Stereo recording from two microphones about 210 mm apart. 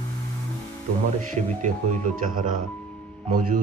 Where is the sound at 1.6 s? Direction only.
35° right (ahead or behind).